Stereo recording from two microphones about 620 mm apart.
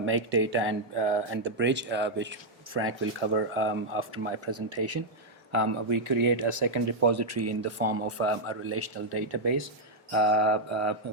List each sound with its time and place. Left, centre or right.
0.0 s speech: centre